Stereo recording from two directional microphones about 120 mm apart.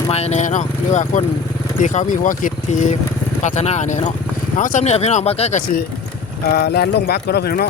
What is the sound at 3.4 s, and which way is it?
Speech, 75° left (ahead or behind).